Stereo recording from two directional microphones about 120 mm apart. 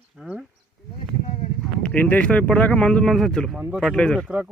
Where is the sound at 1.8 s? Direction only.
10° left (ahead or behind).